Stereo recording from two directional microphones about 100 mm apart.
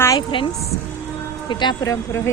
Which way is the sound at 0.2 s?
55° left (ahead or behind).